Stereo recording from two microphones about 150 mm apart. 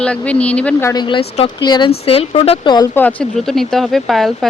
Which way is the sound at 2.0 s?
40° left (ahead or behind).